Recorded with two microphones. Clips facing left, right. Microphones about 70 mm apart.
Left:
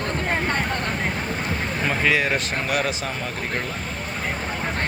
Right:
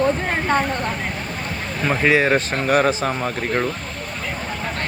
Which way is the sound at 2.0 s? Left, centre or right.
Right.